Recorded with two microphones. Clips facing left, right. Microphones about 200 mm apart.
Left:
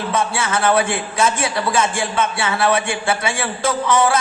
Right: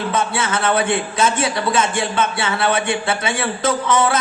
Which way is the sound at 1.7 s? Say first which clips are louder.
Even; 30° left (ahead or behind).